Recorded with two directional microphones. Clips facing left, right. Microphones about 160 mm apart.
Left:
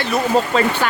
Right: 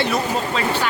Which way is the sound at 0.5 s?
45° left (ahead or behind).